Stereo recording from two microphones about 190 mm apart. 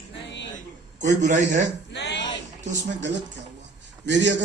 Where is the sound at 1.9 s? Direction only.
65° left (ahead or behind).